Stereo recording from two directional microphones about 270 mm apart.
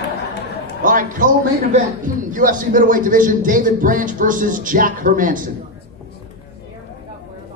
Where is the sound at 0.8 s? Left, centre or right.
Right.